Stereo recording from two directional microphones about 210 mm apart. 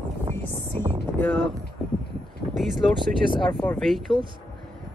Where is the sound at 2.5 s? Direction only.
Centre (ahead or behind).